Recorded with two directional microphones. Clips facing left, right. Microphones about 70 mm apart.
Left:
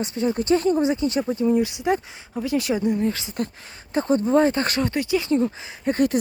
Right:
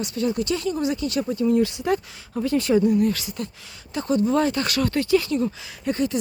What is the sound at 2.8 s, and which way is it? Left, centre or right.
Speech, left.